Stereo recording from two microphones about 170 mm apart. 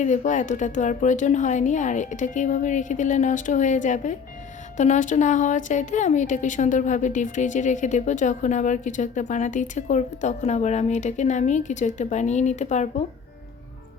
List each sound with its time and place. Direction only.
0.0 s a woman's voice: 45° left (ahead or behind)